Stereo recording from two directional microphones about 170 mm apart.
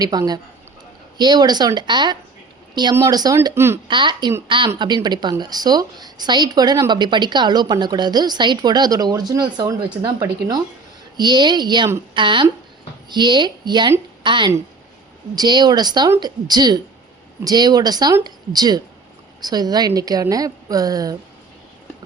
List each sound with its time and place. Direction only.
0.0 s speech: 20° right (ahead or behind)
3.8 s speech: 30° right (ahead or behind)